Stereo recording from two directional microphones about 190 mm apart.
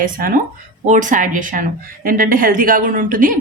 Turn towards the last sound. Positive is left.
turn(degrees=-45)  # may be behind; listen again after turning